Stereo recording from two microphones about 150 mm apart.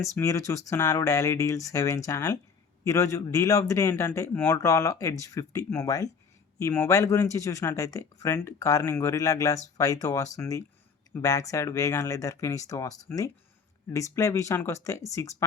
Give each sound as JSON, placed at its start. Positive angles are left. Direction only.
{"t": 0.0, "sound": "speech", "side_deg": 20}